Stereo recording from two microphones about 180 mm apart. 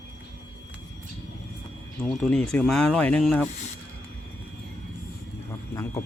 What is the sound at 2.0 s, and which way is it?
Speech, 5° left (ahead or behind).